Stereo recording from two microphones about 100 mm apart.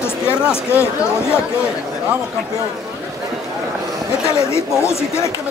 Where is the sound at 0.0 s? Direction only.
25° left (ahead or behind).